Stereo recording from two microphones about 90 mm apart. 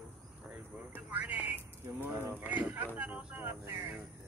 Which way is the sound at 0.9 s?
20° right (ahead or behind).